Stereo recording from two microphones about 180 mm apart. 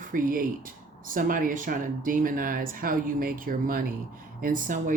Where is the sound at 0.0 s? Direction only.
50° right (ahead or behind).